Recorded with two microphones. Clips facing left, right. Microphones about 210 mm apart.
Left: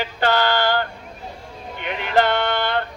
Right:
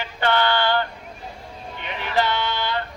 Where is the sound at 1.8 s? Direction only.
55° left (ahead or behind).